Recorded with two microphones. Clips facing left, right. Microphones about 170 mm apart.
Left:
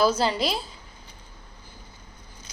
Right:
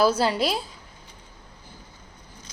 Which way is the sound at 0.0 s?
5° right (ahead or behind).